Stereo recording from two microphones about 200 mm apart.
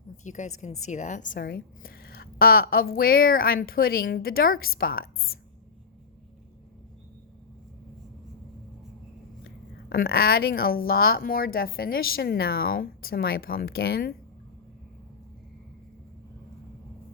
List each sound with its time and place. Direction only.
0.3 s a woman's voice: 40° left (ahead or behind)
9.9 s a woman's voice: 50° left (ahead or behind)